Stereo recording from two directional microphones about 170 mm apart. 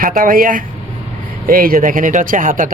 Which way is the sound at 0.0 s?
55° right (ahead or behind).